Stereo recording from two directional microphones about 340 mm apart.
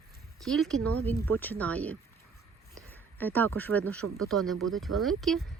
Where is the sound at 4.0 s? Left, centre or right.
Right.